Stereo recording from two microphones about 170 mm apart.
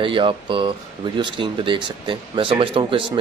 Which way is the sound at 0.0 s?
30° right (ahead or behind).